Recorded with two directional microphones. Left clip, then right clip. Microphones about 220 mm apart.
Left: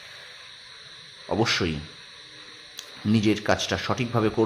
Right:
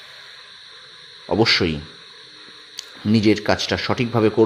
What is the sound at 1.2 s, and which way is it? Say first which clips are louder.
Speech: right 7 dB; 15° right (ahead or behind).